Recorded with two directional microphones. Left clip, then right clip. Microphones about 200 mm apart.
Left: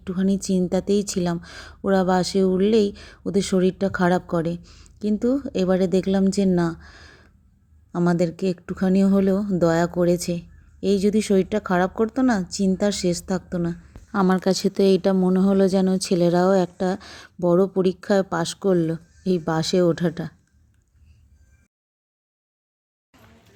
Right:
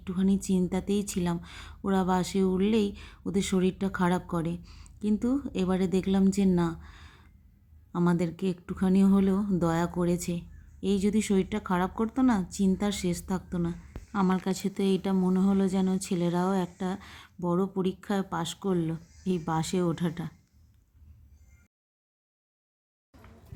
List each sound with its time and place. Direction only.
0.0 s speech: 20° left (ahead or behind)